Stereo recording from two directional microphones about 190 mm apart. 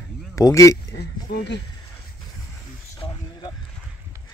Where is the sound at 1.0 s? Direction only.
60° left (ahead or behind).